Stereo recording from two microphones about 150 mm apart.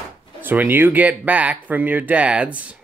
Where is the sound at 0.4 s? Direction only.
15° right (ahead or behind).